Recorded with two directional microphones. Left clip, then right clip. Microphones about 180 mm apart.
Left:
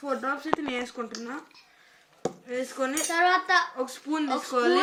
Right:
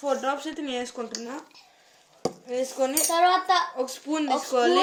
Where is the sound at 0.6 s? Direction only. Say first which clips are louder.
Right 1 dB; 15° left (ahead or behind).